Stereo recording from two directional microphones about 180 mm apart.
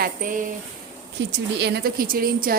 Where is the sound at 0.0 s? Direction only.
50° right (ahead or behind).